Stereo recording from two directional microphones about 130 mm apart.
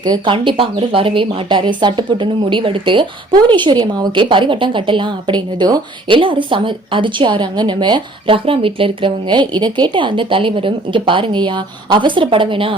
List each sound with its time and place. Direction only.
0.0 s speech: 30° right (ahead or behind)
0.3 s speech: 45° right (ahead or behind)